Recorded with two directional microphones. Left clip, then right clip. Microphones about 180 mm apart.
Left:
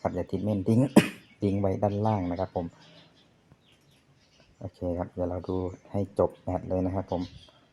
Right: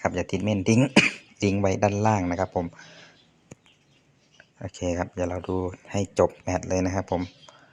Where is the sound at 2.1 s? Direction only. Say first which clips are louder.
Right 5 dB; 20° right (ahead or behind).